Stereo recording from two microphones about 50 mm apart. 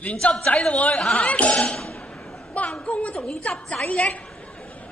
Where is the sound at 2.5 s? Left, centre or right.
Left.